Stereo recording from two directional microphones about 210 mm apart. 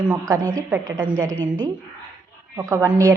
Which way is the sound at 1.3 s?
70° right (ahead or behind).